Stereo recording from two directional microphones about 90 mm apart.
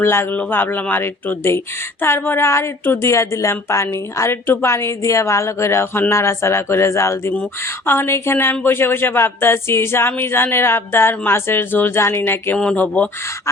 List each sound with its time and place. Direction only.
0.0 s speech: 25° left (ahead or behind)
12.5 s speech: 10° left (ahead or behind)